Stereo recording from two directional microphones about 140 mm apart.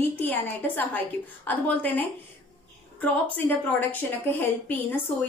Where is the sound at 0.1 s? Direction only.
15° left (ahead or behind).